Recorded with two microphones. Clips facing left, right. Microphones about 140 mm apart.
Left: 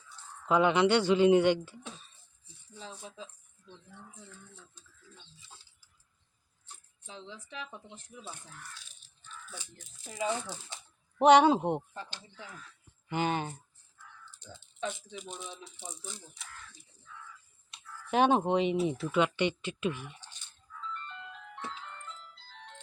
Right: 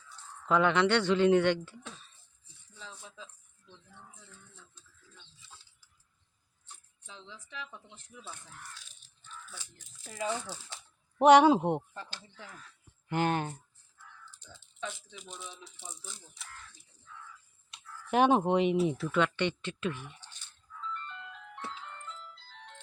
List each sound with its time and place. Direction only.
0.4 s speech: 10° left (ahead or behind)
2.7 s speech: 15° left (ahead or behind)
7.0 s speech: 15° left (ahead or behind)
9.8 s speech: 20° left (ahead or behind)
11.2 s speech: 5° right (ahead or behind)
13.1 s speech: centre (ahead or behind)
14.3 s a sound: centre (ahead or behind)
15.1 s speech: 45° left (ahead or behind)
15.4 s speech: 20° left (ahead or behind)
16.1 s speech: 5° right (ahead or behind)
18.1 s speech: 5° right (ahead or behind)
19.0 s speech: 10° left (ahead or behind)
21.2 s music: 5° left (ahead or behind)